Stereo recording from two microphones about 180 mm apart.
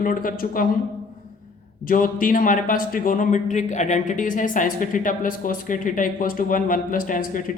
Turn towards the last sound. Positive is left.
turn(degrees=50)  # may be behind; listen again after turning